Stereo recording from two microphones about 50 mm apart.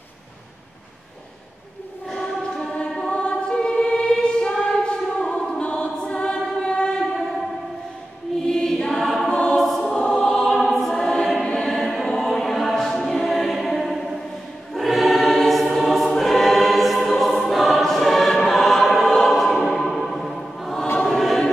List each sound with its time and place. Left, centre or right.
2.0 s choir: centre
5.0 s music: centre
5.6 s choir: left
8.5 s choir: centre
9.3 s choir: centre
9.6 s choir: centre